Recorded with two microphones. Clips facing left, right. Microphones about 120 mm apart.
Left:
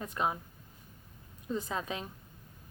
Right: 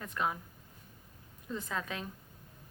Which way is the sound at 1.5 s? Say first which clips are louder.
Left 3 dB; 20° left (ahead or behind).